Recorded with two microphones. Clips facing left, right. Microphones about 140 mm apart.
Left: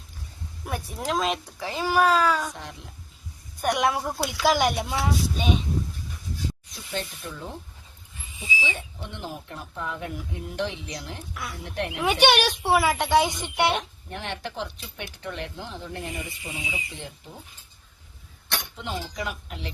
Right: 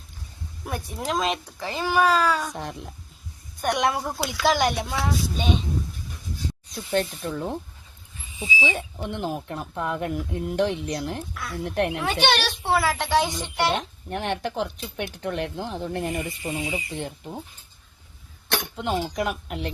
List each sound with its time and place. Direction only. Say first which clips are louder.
0.6 s speech: right 1 dB; 5° left (ahead or behind)
3.6 s speech: even; 5° left (ahead or behind)
6.9 s speech: right 8 dB; 50° right (ahead or behind)
8.7 s speech: right 7 dB; 45° right (ahead or behind)
12.0 s speech: left 2 dB; 15° left (ahead or behind)
13.7 s speech: right 3 dB; 55° right (ahead or behind)
18.5 s speech: right 6 dB; 55° right (ahead or behind)